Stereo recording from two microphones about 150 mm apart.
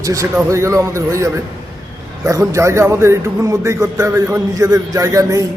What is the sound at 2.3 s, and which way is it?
A man's voice, 20° right (ahead or behind).